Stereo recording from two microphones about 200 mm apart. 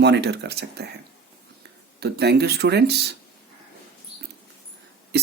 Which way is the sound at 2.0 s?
55° right (ahead or behind).